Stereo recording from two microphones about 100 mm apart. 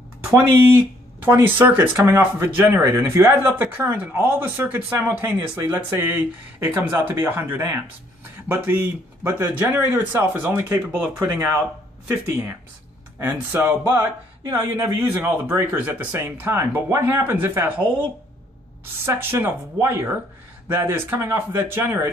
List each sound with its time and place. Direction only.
0.3 s speech: 25° right (ahead or behind)
14.4 s speech: 35° right (ahead or behind)
15.3 s speech: 15° right (ahead or behind)
19.0 s speech: 25° right (ahead or behind)